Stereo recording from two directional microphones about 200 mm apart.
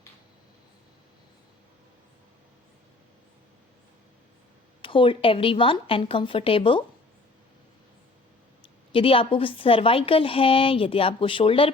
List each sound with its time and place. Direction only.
4.8 s a woman's voice: 25° left (ahead or behind)
8.6 s a woman's voice: 25° left (ahead or behind)